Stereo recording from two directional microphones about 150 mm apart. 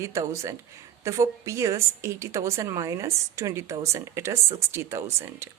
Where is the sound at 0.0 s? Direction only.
20° right (ahead or behind).